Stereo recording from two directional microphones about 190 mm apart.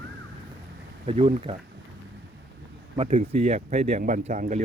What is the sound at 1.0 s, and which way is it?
Speech, 30° right (ahead or behind).